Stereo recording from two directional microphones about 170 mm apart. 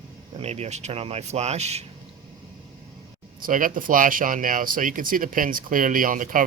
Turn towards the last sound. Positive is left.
turn(degrees=-50)  # may be behind; listen again after turning